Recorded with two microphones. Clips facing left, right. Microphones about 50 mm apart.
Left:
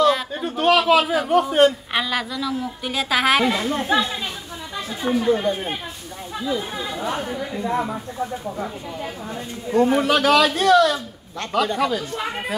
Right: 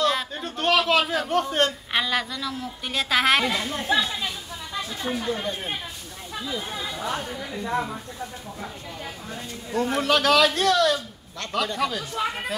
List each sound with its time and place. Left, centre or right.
0.0 s a man's voice: centre
9.7 s speech: centre